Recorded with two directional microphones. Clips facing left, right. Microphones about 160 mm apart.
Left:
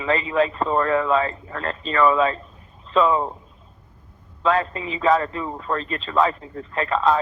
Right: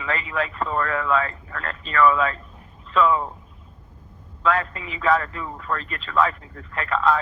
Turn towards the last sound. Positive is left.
turn(degrees=25)  # may be behind; listen again after turning